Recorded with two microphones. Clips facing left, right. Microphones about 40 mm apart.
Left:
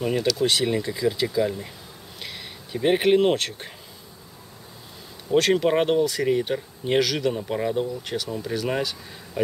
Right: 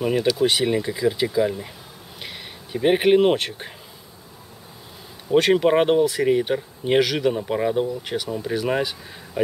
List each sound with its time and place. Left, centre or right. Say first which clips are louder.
0.0 s speech: right 3 dB; centre
5.3 s speech: right 3 dB; centre